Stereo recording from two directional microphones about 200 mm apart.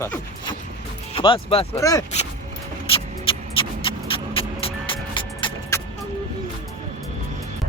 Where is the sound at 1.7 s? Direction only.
15° left (ahead or behind).